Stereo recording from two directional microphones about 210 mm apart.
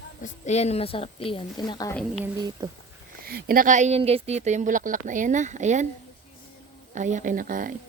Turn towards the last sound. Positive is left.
turn(degrees=-40)  # may be behind; listen again after turning